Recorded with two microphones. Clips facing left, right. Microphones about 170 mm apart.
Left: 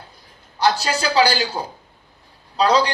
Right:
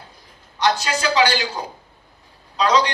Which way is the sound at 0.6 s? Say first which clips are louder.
Left 1 dB; 35° left (ahead or behind).